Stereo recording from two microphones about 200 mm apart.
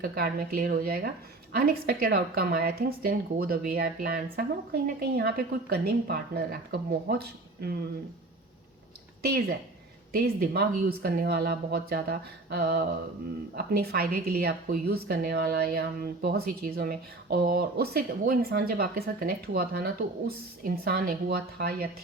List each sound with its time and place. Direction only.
0.0 s a woman's voice: 50° right (ahead or behind)
9.2 s a woman's voice: 50° right (ahead or behind)